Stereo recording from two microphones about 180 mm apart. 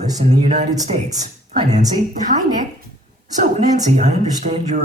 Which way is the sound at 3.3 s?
40° right (ahead or behind).